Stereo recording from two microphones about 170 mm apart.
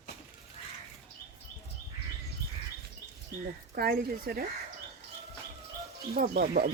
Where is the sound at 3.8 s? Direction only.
65° right (ahead or behind).